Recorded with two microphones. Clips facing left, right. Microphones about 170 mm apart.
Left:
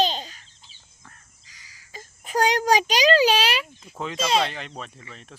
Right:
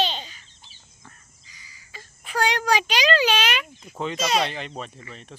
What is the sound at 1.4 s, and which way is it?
Crow, 80° left.